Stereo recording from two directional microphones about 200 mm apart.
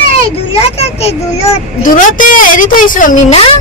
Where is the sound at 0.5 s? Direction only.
30° left (ahead or behind).